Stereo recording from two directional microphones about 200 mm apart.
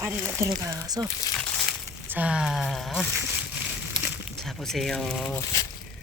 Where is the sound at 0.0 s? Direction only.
10° right (ahead or behind).